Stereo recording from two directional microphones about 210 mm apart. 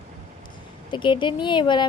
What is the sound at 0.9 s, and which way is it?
Speech, 20° left (ahead or behind).